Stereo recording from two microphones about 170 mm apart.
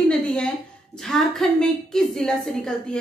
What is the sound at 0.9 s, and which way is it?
A woman's voice, 5° left (ahead or behind).